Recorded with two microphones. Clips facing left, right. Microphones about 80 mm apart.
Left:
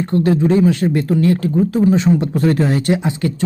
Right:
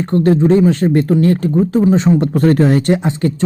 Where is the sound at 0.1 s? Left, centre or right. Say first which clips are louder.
Right 3 dB; right.